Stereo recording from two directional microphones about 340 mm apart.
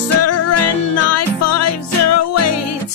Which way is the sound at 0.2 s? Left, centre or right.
Left.